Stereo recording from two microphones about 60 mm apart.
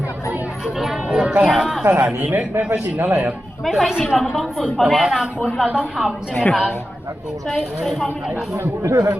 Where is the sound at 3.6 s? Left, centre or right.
Centre.